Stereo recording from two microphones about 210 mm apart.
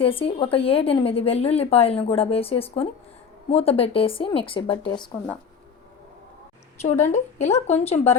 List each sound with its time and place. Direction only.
0.0 s a woman's voice: 25° left (ahead or behind)
7.0 s a woman's voice: 35° left (ahead or behind)